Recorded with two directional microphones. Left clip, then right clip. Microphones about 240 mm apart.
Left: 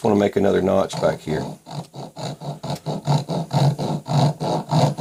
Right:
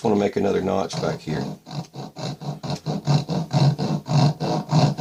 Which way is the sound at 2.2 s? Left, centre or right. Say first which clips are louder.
Left 2 dB; centre.